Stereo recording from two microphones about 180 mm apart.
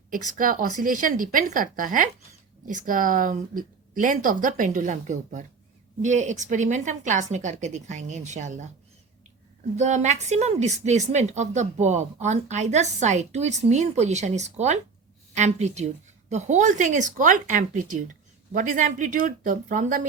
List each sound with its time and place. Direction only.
0.3 s a woman's voice: 50° right (ahead or behind)
9.7 s a woman's voice: 40° right (ahead or behind)